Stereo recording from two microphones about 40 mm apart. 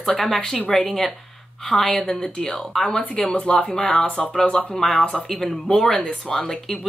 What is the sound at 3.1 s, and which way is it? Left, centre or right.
A woman's voice, left.